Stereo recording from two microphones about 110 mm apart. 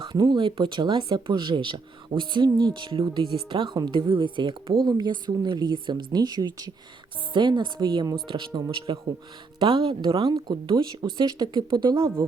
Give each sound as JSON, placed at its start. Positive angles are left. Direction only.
{"t": 0.0, "sound": "a woman's voice", "side_deg": -40}
{"t": 11.9, "sound": "a woman's voice", "side_deg": -25}